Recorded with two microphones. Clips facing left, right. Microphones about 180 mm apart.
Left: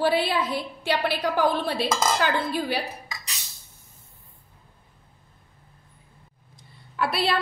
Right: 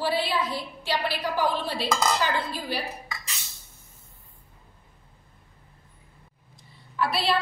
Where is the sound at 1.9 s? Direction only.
20° left (ahead or behind).